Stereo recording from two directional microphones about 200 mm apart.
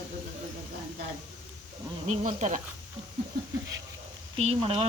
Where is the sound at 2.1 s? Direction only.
35° right (ahead or behind).